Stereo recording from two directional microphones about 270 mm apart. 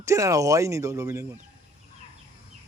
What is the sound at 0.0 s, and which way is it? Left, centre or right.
Speech, centre.